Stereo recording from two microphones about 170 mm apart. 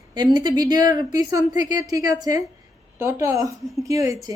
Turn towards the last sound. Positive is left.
turn(degrees=-20)  # may be behind; listen again after turning